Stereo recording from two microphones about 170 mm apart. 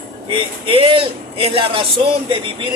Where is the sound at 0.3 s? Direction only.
30° right (ahead or behind).